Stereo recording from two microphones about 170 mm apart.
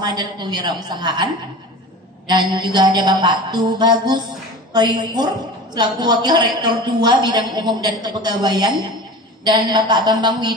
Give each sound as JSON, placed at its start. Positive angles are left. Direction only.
{"t": 0.0, "sound": "a woman's voice", "side_deg": -25}
{"t": 2.5, "sound": "a woman's voice", "side_deg": -25}